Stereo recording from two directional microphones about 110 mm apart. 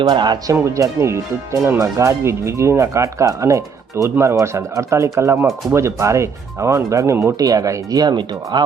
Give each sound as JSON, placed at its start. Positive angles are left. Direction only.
{"t": 0.0, "sound": "speech", "side_deg": -40}
{"t": 0.5, "sound": "speech", "side_deg": -30}